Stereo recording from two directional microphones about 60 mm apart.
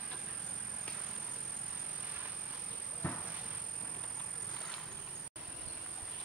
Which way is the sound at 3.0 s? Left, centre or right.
Left.